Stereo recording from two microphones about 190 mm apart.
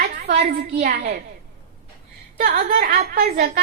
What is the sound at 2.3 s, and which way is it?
A child's voice, 40° right (ahead or behind).